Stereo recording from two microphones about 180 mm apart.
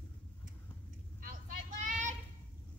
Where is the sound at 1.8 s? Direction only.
45° right (ahead or behind).